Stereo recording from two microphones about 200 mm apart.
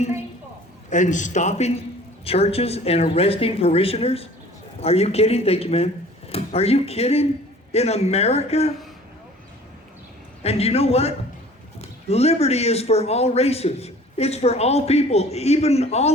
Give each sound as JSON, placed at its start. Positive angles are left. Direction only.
{"t": 0.9, "sound": "speech", "side_deg": 40}
{"t": 10.4, "sound": "speech", "side_deg": 30}